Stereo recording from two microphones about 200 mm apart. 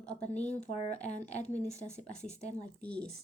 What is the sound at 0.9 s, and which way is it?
Speech, 35° left (ahead or behind).